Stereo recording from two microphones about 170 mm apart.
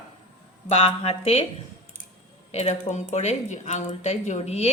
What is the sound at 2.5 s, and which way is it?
Speech, 40° left (ahead or behind).